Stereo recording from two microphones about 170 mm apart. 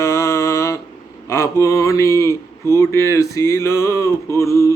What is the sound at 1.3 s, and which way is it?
Speech, 15° left (ahead or behind).